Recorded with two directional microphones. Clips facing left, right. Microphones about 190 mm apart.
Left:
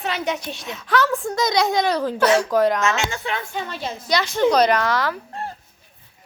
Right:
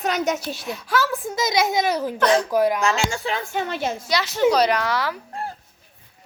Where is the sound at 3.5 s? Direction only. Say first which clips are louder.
Right 4 dB; 55° right (ahead or behind).